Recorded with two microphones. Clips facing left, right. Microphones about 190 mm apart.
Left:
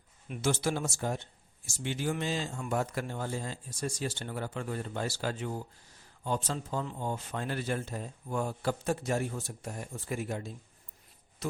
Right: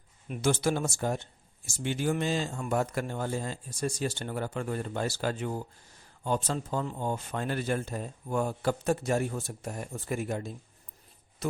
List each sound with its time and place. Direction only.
0.3 s speech: 50° right (ahead or behind)